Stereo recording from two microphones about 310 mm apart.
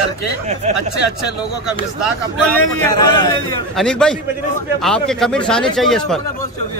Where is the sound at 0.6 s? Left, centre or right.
Right.